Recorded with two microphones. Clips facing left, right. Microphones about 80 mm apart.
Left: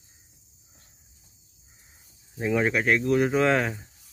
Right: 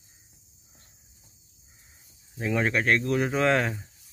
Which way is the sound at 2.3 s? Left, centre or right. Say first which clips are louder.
Left 2 dB; centre.